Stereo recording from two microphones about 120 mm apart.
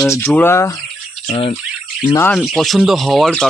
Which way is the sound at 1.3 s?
55° left (ahead or behind).